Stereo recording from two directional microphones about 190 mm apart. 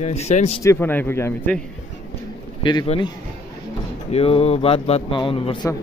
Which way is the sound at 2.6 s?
25° left (ahead or behind).